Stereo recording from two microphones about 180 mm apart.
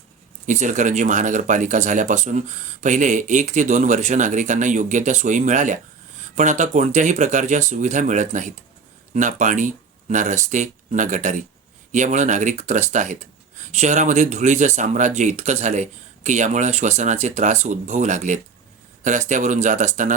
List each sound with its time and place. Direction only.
0.4 s speech: 45° right (ahead or behind)